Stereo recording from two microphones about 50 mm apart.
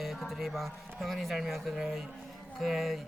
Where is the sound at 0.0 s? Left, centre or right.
Centre.